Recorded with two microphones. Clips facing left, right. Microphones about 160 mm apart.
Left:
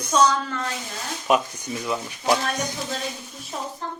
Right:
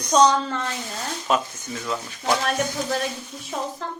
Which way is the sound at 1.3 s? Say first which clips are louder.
Left 2 dB; 10° left (ahead or behind).